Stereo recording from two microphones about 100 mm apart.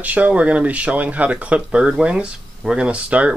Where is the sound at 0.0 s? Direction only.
15° right (ahead or behind).